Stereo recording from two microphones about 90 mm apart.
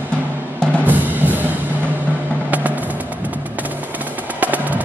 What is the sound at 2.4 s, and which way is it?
Music, 15° right (ahead or behind).